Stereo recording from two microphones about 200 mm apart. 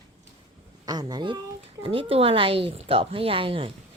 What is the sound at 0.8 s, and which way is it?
A child's voice, 20° right (ahead or behind).